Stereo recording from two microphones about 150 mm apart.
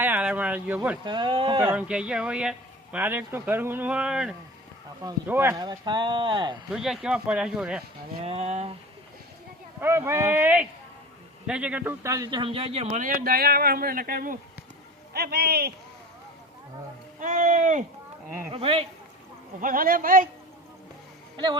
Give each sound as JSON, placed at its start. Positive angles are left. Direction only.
{"t": 0.0, "sound": "a sound", "side_deg": -10}
{"t": 1.0, "sound": "speech", "side_deg": -30}
{"t": 1.6, "sound": "speech", "side_deg": -10}
{"t": 5.3, "sound": "speech", "side_deg": -15}
{"t": 5.5, "sound": "speech", "side_deg": -30}
{"t": 6.7, "sound": "speech", "side_deg": 0}
{"t": 8.2, "sound": "speech", "side_deg": -45}
{"t": 9.8, "sound": "speech", "side_deg": -15}
{"t": 12.4, "sound": "speech", "side_deg": -40}
{"t": 13.0, "sound": "speech", "side_deg": -75}
{"t": 15.1, "sound": "speech", "side_deg": -90}
{"t": 17.2, "sound": "speech", "side_deg": -60}
{"t": 18.5, "sound": "speech", "side_deg": -40}
{"t": 19.5, "sound": "speech", "side_deg": -65}